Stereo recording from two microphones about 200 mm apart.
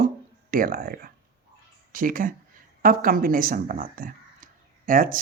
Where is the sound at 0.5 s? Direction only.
45° right (ahead or behind).